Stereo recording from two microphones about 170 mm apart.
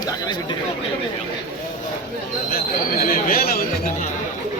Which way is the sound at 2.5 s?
60° left (ahead or behind).